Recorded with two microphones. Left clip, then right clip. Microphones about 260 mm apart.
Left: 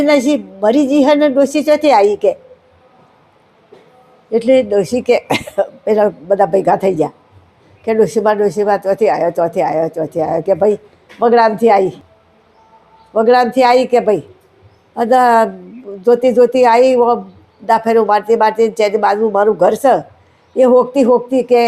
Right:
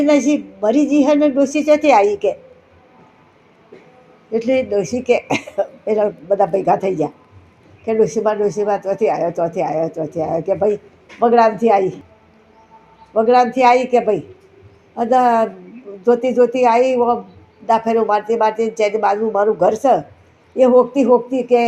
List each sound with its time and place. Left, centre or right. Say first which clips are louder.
0.0 s speech: left 3 dB; left
4.3 s speech: left 6 dB; left
13.1 s speech: left 3 dB; left